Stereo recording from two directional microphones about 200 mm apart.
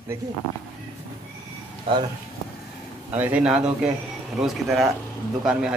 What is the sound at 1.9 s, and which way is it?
Speech, 25° right (ahead or behind).